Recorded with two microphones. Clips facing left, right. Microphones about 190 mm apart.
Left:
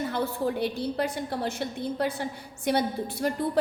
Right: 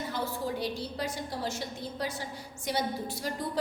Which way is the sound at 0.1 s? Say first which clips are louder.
Left 5 dB; 60° left (ahead or behind).